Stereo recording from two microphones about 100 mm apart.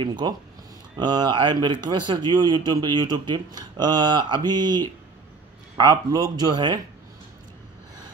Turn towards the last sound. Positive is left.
turn(degrees=-45)  # may be behind; listen again after turning